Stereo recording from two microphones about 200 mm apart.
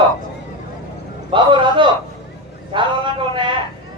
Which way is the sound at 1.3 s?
25° right (ahead or behind).